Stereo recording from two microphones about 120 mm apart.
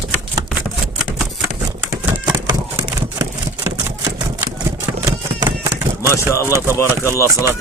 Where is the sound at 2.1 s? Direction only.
15° right (ahead or behind).